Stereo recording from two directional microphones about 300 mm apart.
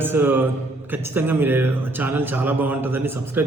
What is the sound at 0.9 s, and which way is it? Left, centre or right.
A man's voice, centre.